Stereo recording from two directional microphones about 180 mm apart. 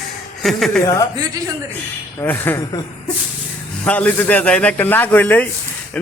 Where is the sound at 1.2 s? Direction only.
20° right (ahead or behind).